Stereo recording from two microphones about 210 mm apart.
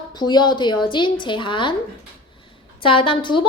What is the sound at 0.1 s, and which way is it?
Speech, 20° left (ahead or behind).